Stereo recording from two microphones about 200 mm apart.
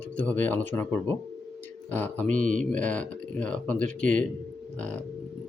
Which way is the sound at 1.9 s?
10° left (ahead or behind).